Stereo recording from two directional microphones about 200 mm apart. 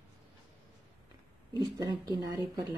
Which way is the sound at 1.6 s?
20° right (ahead or behind).